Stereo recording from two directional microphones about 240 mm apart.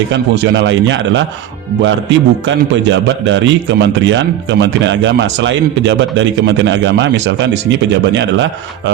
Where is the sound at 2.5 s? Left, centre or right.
Right.